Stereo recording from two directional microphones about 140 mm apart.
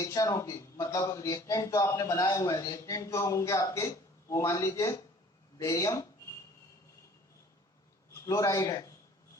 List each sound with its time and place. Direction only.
0.0 s a man's voice: 25° left (ahead or behind)
8.1 s a man's voice: 25° left (ahead or behind)